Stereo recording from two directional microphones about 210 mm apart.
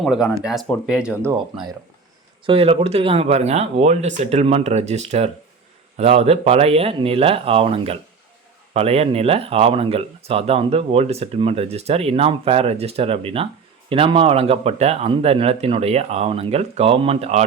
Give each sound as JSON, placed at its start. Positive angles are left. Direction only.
{"t": 0.0, "sound": "speech", "side_deg": 0}
{"t": 2.5, "sound": "speech", "side_deg": -25}